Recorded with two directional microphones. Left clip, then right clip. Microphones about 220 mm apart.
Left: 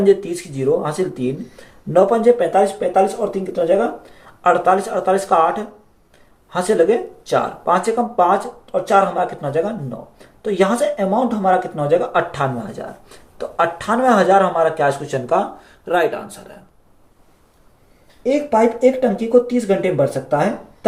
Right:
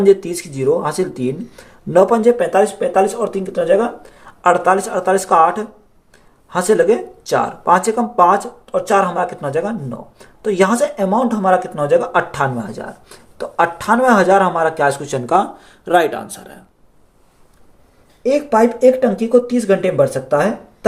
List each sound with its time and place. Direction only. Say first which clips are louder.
0.0 s speech: right 2 dB; 50° right (ahead or behind)
18.3 s speech: right 2 dB; 50° right (ahead or behind)